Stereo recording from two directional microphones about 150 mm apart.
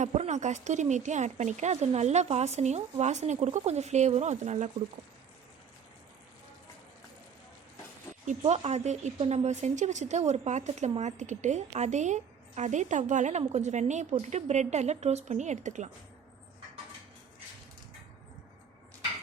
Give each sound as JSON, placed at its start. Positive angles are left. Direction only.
{"t": 0.0, "sound": "a woman's voice", "side_deg": -50}
{"t": 8.3, "sound": "a woman's voice", "side_deg": -45}